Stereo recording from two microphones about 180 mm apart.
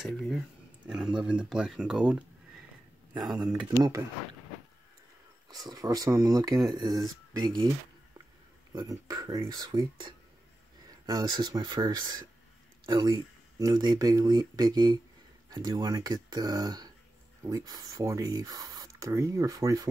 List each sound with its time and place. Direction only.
0.0 s speech: centre (ahead or behind)
3.3 s speech: 5° right (ahead or behind)
3.7 s speech: 20° right (ahead or behind)
5.5 s speech: 20° right (ahead or behind)
8.7 s speech: 20° right (ahead or behind)